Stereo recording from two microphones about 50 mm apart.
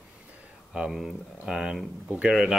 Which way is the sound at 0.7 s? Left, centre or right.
Centre.